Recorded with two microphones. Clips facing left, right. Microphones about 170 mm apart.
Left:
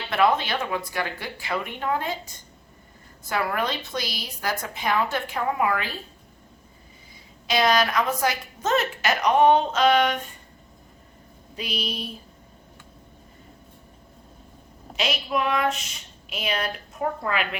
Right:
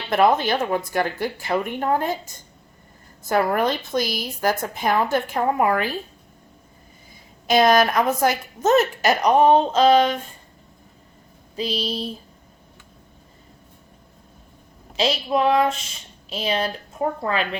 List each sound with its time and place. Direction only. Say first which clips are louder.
0.1 s a woman's voice: right 4 dB; 45° right (ahead or behind)
7.4 s a woman's voice: right 5 dB; 50° right (ahead or behind); by 10.2 s 30° right (ahead or behind)
11.5 s a woman's voice: right 6 dB; 30° right (ahead or behind)
14.9 s a woman's voice: right 5 dB; 30° right (ahead or behind)